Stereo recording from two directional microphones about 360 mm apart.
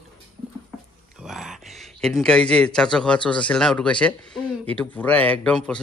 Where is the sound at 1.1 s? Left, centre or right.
Centre.